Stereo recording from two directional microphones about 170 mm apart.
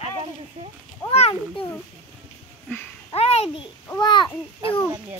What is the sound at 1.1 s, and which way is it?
Speech, 35° left (ahead or behind).